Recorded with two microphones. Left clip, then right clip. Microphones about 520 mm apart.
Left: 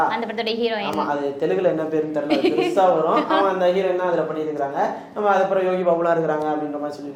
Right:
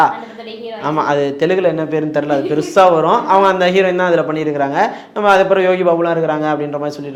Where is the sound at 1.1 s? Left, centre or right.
Right.